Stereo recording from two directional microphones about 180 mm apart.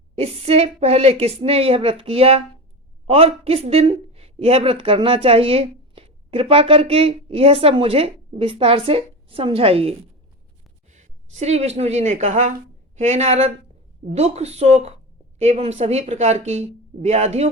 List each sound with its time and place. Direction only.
0.2 s speech: 35° right (ahead or behind)
11.3 s speech: 40° right (ahead or behind)